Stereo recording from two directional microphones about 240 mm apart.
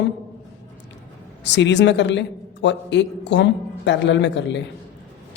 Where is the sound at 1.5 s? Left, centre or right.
Left.